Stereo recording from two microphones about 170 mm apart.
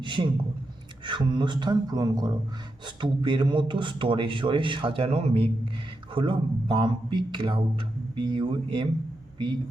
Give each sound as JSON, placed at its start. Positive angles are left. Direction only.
{"t": 0.0, "sound": "a man's voice", "side_deg": -30}